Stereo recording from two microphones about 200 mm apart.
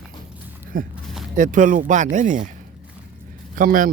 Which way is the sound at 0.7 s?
45° right (ahead or behind).